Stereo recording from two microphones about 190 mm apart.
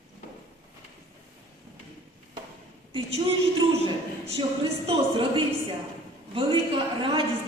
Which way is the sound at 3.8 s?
30° right (ahead or behind).